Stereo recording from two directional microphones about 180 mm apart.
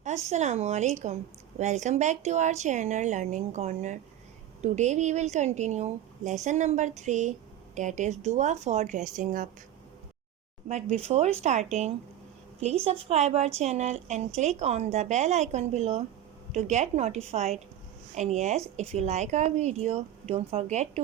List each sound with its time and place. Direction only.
0.0 s a woman's voice: 40° right (ahead or behind)
10.9 s a woman's voice: 35° right (ahead or behind)